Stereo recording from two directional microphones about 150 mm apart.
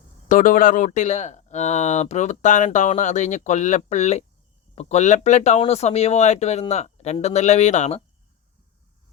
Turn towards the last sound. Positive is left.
turn(degrees=50)  # may be behind; listen again after turning